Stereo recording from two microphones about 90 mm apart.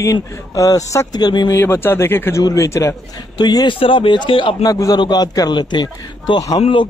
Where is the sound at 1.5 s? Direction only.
25° left (ahead or behind).